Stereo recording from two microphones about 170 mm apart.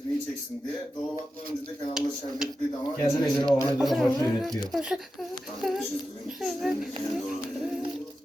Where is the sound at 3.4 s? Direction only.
20° right (ahead or behind).